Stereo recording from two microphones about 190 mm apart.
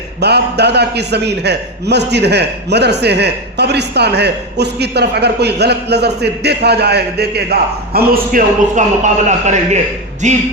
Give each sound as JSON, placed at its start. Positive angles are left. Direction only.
{"t": 0.2, "sound": "a man's voice", "side_deg": -60}